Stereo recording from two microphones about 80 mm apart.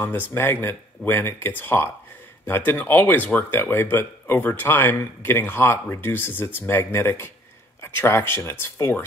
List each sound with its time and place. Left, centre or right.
0.0 s speech: left